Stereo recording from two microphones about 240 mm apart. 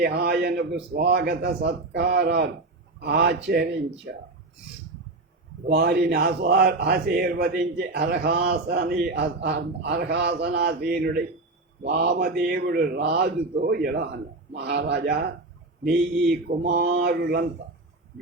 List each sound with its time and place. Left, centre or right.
0.0 s speech: right
5.6 s speech: right